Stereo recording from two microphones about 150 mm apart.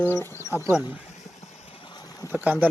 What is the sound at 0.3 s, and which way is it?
Speech, 20° left (ahead or behind).